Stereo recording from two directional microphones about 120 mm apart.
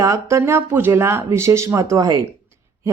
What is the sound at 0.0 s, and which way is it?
Speech, 25° right (ahead or behind).